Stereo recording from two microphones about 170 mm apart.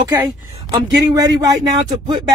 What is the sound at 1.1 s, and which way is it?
Speech, 20° right (ahead or behind).